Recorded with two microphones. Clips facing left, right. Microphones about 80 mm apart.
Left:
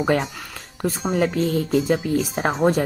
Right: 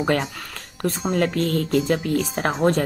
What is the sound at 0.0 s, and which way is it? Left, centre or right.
Speech, centre.